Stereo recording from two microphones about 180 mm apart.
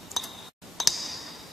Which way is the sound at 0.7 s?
Centre (ahead or behind).